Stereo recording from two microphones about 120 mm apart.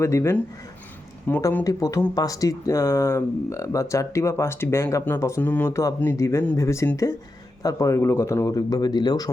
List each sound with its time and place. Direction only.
0.0 s speech: 25° left (ahead or behind)